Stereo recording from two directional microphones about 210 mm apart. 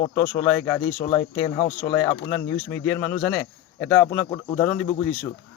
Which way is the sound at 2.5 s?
60° left (ahead or behind).